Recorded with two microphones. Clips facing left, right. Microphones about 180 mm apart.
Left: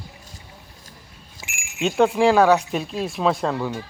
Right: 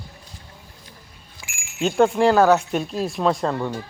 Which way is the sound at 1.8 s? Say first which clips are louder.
Even; centre (ahead or behind).